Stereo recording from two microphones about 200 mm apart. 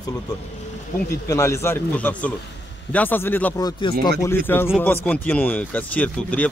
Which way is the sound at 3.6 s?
25° left (ahead or behind).